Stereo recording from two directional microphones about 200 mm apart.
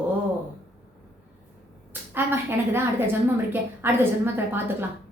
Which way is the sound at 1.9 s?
10° right (ahead or behind).